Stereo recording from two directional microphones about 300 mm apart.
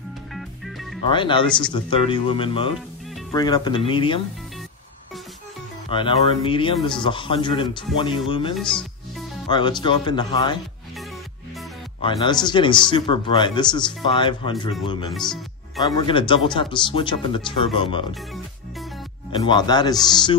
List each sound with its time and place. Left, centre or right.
0.3 s music: centre
1.0 s speech: centre
5.9 s speech: centre
8.5 s music: centre
9.5 s speech: centre
12.0 s speech: centre
15.1 s speech: centre
15.8 s speech: centre
19.3 s speech: centre